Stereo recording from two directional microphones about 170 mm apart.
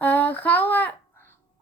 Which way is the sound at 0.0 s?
10° left (ahead or behind).